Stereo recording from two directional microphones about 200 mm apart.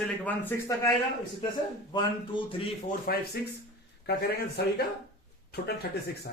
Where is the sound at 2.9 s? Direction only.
50° left (ahead or behind).